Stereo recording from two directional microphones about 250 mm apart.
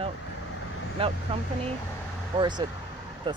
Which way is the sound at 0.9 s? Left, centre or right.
Right.